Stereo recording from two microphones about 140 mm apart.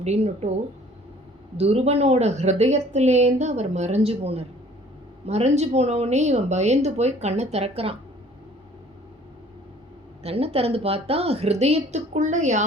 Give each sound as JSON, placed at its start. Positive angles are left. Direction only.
{"t": 0.0, "sound": "a woman's voice", "side_deg": -50}
{"t": 1.5, "sound": "a woman's voice", "side_deg": -50}
{"t": 10.2, "sound": "a woman's voice", "side_deg": -45}